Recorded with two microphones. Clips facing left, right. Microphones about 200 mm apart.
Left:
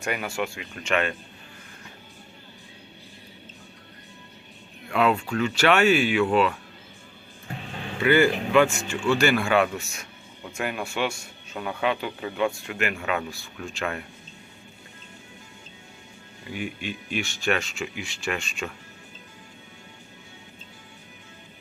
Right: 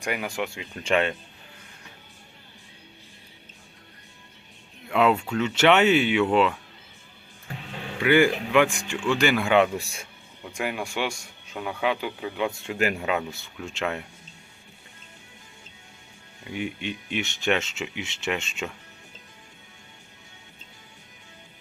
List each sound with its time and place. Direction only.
0.0 s speech: 15° right (ahead or behind); by 1.1 s 30° right (ahead or behind)
4.9 s speech: 20° right (ahead or behind)
8.0 s speech: 15° right (ahead or behind)
9.7 s a man's voice: 30° right (ahead or behind)
10.5 s speech: 10° right (ahead or behind)
12.5 s speech: 25° right (ahead or behind)
16.5 s speech: 20° right (ahead or behind)